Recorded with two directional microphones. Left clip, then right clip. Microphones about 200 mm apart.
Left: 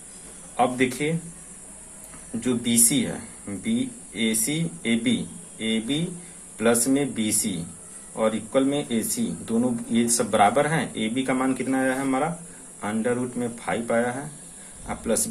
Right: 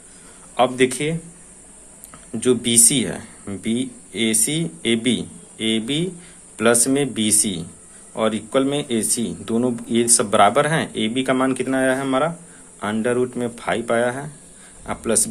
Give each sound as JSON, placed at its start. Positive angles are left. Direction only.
{"t": 0.5, "sound": "speech", "side_deg": -45}
{"t": 2.4, "sound": "speech", "side_deg": -50}